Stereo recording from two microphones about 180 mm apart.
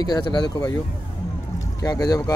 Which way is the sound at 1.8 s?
20° left (ahead or behind).